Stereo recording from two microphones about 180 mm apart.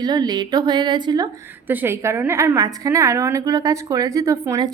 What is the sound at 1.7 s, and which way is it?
A woman's voice, 10° right (ahead or behind).